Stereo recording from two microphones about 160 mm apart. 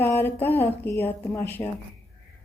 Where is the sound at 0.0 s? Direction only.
10° left (ahead or behind).